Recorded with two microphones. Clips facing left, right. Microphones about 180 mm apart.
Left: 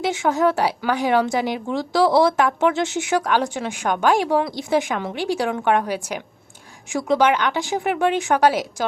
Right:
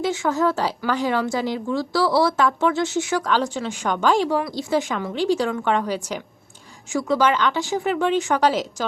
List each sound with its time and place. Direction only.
0.0 s a woman's voice: 15° left (ahead or behind)